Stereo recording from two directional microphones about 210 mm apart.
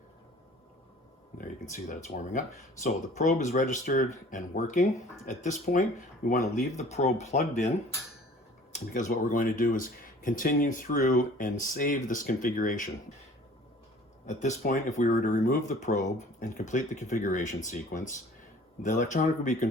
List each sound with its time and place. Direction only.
1.4 s speech: 35° left (ahead or behind)
8.9 s speech: 40° left (ahead or behind)
14.3 s speech: 35° left (ahead or behind)